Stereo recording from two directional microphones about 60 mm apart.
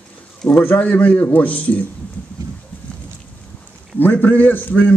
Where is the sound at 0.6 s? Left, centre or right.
Left.